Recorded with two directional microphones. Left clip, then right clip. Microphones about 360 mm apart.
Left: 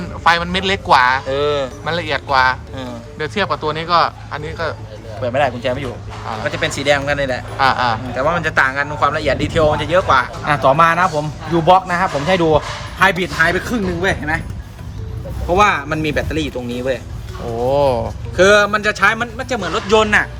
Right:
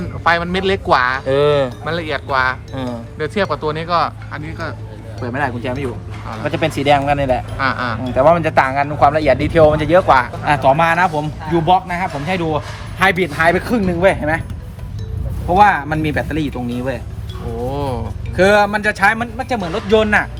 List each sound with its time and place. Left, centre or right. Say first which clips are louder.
0.3 s speech: left 1 dB; centre
1.3 s a sound: right 4 dB; centre
1.8 s a man's voice: left 1 dB; centre
7.6 s speech: left 4 dB; centre
8.1 s a man's voice: right 9 dB; centre
10.4 s speech: left 1 dB; centre
13.1 s a man's voice: right 3 dB; centre
15.5 s a man's voice: right 2 dB; centre
17.7 s speech: left 10 dB; centre
18.3 s a man's voice: left 1 dB; centre